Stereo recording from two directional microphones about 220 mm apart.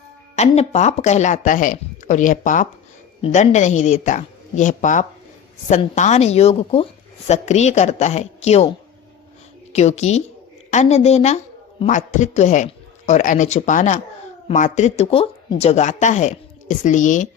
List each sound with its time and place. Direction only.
0.3 s a woman's voice: 30° left (ahead or behind)
9.7 s speech: 30° left (ahead or behind)